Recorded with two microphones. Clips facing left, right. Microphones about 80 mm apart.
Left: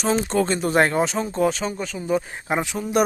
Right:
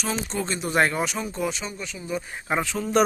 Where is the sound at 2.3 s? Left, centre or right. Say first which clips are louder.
Left 2 dB; left.